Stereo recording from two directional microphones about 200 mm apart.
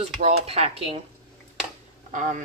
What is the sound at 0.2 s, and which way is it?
Speech, 30° right (ahead or behind).